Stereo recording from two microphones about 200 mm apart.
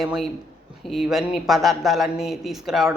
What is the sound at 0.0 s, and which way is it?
A woman's voice, centre (ahead or behind).